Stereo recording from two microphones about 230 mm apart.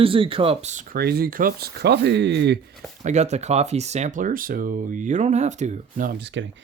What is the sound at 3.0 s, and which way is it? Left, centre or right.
Speech, right.